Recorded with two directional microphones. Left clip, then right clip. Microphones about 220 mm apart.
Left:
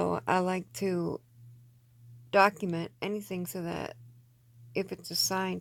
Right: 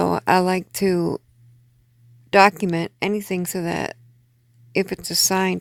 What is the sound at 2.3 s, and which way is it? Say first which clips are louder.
Speech: right 10 dB; 45° right (ahead or behind).